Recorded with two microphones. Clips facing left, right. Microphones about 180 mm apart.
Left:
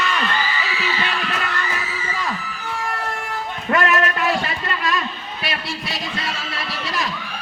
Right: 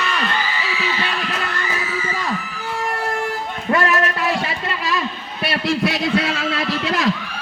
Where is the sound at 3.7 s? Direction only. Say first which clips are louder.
Right 1 dB; 30° right (ahead or behind).